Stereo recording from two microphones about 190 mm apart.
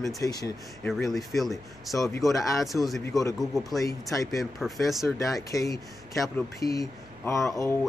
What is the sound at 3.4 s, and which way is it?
Speech, centre (ahead or behind).